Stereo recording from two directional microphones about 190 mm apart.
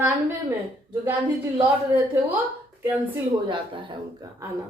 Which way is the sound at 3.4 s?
25° right (ahead or behind).